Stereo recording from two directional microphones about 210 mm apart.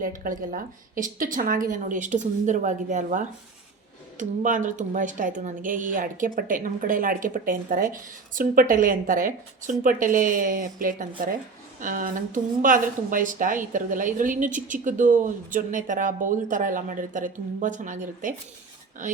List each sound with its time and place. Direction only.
0.0 s a woman's voice: 40° right (ahead or behind)